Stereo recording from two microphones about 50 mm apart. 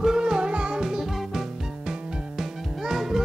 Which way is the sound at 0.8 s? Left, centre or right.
Centre.